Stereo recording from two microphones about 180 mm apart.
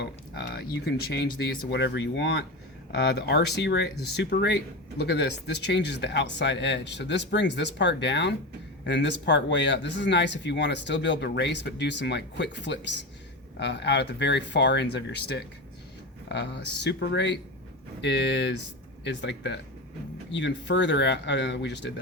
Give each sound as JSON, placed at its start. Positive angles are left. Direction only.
{"t": 0.0, "sound": "speech", "side_deg": 65}
{"t": 2.9, "sound": "speech", "side_deg": 65}